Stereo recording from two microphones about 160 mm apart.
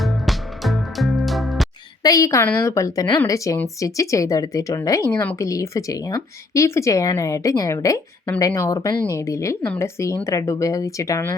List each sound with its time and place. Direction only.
0.0 s music: centre (ahead or behind)
2.0 s speech: 20° left (ahead or behind)